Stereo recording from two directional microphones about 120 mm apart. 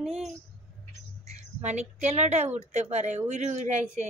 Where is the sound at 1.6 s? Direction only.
70° right (ahead or behind).